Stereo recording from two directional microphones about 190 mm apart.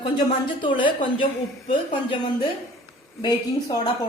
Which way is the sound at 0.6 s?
25° left (ahead or behind).